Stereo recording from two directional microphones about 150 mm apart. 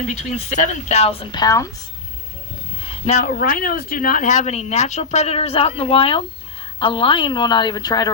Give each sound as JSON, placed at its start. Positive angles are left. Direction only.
{"t": 0.3, "sound": "speech", "side_deg": 50}
{"t": 2.8, "sound": "a sound", "side_deg": 45}
{"t": 3.2, "sound": "a woman's voice", "side_deg": 75}